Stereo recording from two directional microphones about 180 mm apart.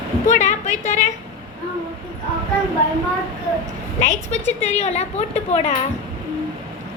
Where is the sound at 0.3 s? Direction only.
45° left (ahead or behind).